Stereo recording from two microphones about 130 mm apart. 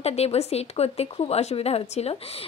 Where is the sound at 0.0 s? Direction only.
55° left (ahead or behind).